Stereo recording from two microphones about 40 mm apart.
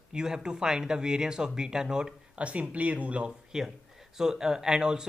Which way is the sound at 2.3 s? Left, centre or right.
Right.